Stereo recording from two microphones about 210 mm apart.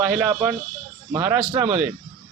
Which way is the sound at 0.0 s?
5° right (ahead or behind).